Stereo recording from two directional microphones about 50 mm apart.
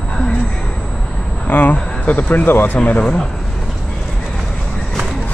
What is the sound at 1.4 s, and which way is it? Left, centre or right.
Speech, left.